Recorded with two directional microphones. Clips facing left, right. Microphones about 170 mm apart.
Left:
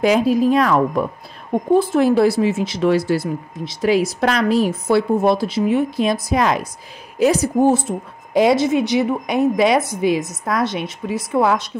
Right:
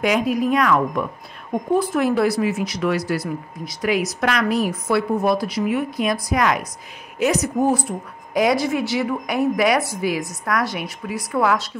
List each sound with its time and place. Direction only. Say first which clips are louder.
0.0 s speech: left 4 dB; 30° left (ahead or behind)